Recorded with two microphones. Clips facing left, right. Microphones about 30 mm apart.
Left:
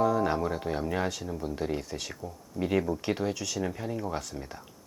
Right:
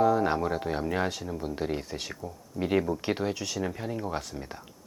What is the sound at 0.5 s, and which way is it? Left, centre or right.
Speech, centre.